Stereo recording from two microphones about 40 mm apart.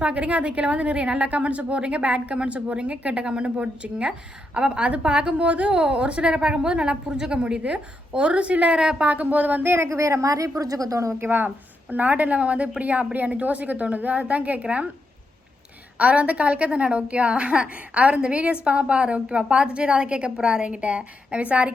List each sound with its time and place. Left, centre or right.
0.0 s a woman's voice: right
11.2 s speech: right
11.4 s a woman's voice: right
16.0 s a woman's voice: right